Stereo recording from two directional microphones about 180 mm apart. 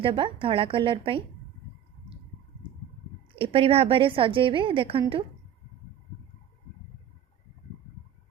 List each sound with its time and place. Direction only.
0.0 s a woman's voice: 30° right (ahead or behind)
3.3 s a woman's voice: 30° right (ahead or behind)